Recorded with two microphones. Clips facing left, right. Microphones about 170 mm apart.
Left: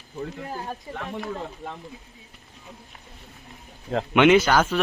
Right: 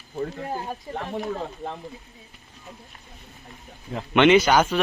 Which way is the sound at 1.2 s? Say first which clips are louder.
Right 3 dB; 30° right (ahead or behind).